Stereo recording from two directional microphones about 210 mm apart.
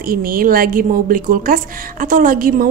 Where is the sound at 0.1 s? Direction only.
45° right (ahead or behind).